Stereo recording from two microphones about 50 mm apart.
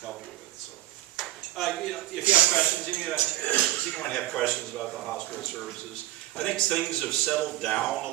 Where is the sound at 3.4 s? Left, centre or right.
Left.